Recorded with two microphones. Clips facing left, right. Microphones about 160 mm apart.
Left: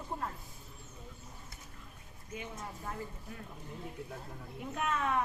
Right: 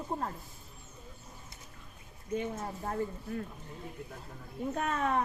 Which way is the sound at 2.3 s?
35° right (ahead or behind).